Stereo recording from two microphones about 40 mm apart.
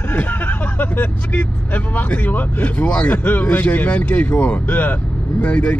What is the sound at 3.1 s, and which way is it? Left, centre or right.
A man's voice, left.